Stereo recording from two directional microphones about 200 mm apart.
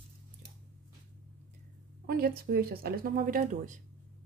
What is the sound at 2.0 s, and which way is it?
Speech, 50° right (ahead or behind).